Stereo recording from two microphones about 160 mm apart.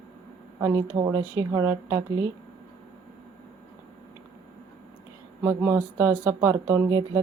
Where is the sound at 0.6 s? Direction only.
20° right (ahead or behind).